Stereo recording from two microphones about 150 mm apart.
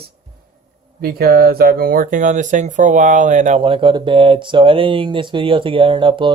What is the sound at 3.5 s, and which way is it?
Speech, 35° right (ahead or behind).